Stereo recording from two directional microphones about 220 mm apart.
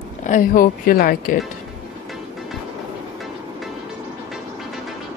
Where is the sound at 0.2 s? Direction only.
35° left (ahead or behind).